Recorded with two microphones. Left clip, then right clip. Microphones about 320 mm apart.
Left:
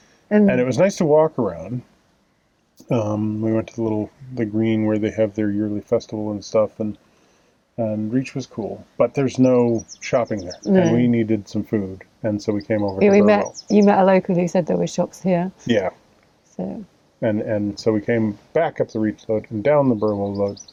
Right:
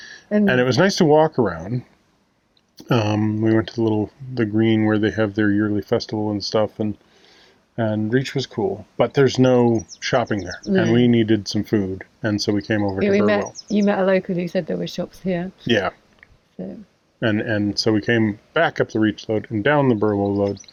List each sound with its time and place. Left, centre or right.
0.4 s speech: right
2.9 s speech: right
10.6 s speech: left
11.0 s speech: right
13.0 s speech: left
15.6 s speech: centre
16.6 s speech: left
17.2 s speech: centre